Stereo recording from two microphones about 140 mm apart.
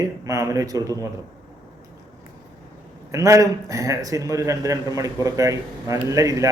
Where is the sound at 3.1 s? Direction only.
20° right (ahead or behind).